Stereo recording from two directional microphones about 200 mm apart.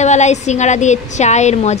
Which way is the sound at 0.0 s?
35° left (ahead or behind).